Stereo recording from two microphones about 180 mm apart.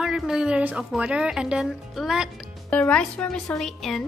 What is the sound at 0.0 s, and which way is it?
Speech, 5° right (ahead or behind).